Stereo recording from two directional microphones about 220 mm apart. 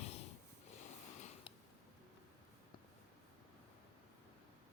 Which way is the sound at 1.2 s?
30° left (ahead or behind).